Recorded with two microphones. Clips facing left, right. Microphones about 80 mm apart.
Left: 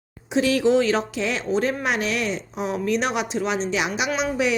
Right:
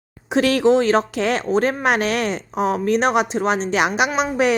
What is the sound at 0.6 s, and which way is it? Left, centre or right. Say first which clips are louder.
Speech: right 4 dB; right.